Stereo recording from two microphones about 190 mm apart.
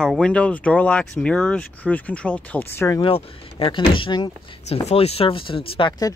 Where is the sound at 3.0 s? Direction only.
30° left (ahead or behind).